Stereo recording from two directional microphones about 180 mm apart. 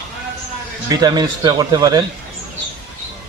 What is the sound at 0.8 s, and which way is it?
A man's voice, 20° right (ahead or behind).